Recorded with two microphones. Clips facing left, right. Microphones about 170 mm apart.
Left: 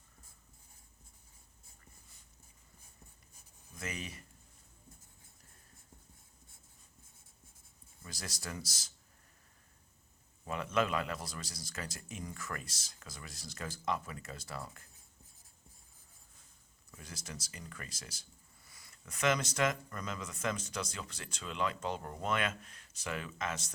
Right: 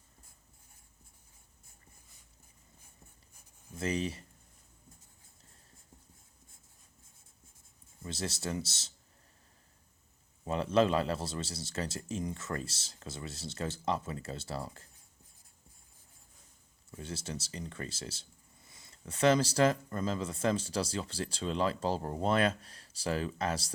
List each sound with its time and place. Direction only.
3.8 s speech: 30° right (ahead or behind)
8.0 s speech: 25° right (ahead or behind)
10.4 s speech: 30° right (ahead or behind)
16.9 s speech: 30° right (ahead or behind)